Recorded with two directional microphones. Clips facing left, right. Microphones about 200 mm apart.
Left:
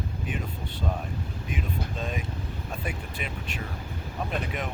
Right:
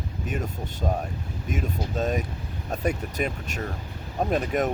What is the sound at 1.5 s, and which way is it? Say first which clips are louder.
Speech: right 5 dB; 45° right (ahead or behind).